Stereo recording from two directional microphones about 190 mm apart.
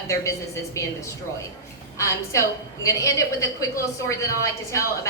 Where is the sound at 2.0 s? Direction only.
15° left (ahead or behind).